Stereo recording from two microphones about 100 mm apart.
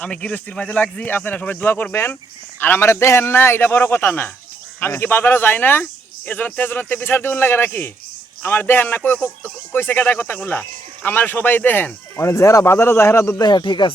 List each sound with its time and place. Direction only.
0.0 s speech: 15° left (ahead or behind)
13.4 s speech: 50° left (ahead or behind)